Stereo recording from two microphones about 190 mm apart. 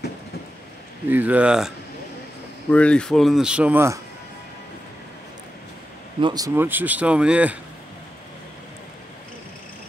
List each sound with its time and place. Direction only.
1.0 s speech: 10° right (ahead or behind)
2.7 s speech: 5° left (ahead or behind); by 4.0 s 10° right (ahead or behind)
6.2 s speech: 20° right (ahead or behind)